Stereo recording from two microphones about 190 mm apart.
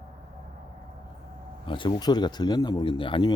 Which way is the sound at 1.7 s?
25° left (ahead or behind).